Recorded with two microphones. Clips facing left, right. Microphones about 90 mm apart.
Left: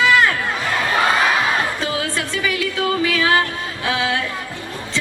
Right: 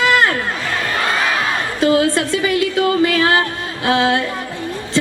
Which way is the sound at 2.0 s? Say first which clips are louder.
Right 6 dB; 40° right (ahead or behind).